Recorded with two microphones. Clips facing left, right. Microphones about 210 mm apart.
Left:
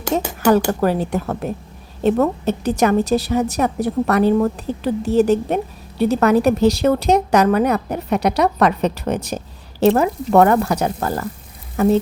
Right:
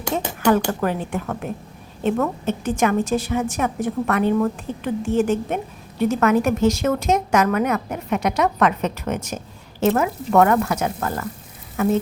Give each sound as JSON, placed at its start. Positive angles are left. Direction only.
{"t": 0.7, "sound": "a woman's voice", "side_deg": 35}